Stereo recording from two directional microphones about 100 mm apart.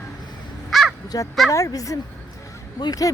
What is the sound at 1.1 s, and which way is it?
A woman's voice, 40° left (ahead or behind).